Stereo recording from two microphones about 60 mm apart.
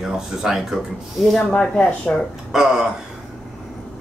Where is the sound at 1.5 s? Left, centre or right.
Centre.